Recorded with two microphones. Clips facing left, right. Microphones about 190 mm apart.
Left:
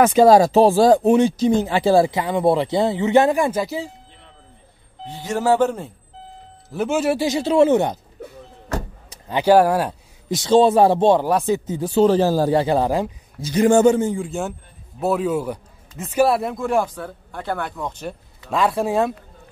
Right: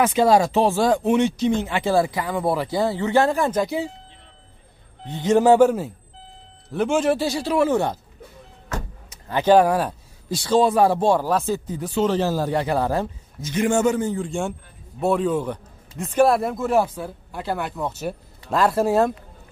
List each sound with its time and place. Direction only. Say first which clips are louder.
0.0 s speech: left 5 dB; 40° left (ahead or behind); by 3.9 s centre (ahead or behind)
5.1 s speech: right 4 dB; 20° right (ahead or behind)
6.7 s speech: even; 5° left (ahead or behind)
7.2 s speech: left 5 dB; 25° left (ahead or behind)
9.3 s speech: left 1 dB; 10° left (ahead or behind)
10.5 s speech: left 4 dB; 25° left (ahead or behind)
12.8 s speech: left 2 dB; 15° left (ahead or behind)
13.4 s speech: left 6 dB; 35° left (ahead or behind)
14.1 s speech: even; 5° left (ahead or behind)